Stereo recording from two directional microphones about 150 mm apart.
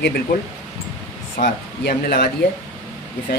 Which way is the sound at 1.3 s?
80° left.